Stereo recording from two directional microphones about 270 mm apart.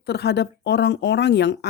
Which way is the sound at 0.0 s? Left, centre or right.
Left.